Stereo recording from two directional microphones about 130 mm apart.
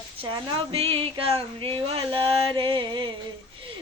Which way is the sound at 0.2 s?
40° right (ahead or behind).